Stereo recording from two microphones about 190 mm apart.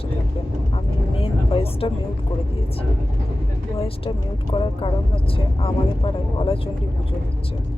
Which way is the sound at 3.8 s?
25° left (ahead or behind).